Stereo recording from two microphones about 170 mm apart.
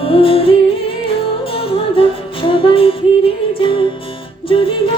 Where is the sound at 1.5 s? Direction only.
30° left (ahead or behind).